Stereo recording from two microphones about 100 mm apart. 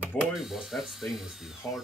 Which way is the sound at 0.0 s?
5° right (ahead or behind).